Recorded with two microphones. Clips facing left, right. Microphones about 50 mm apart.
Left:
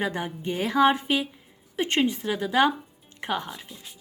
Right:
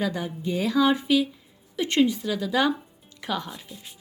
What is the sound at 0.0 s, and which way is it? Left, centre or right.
A woman's voice, left.